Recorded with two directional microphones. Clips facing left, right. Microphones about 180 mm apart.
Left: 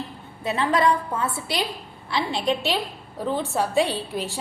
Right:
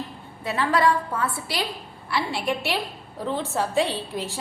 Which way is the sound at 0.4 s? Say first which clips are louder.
Left 1 dB; 20° left (ahead or behind).